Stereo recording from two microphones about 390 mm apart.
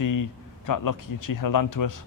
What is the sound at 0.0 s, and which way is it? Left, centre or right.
Speech, left.